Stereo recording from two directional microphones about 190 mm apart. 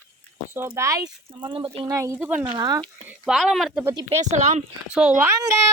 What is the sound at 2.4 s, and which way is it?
Speech, 20° right (ahead or behind).